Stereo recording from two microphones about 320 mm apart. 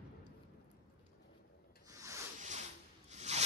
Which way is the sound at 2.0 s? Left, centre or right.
Centre.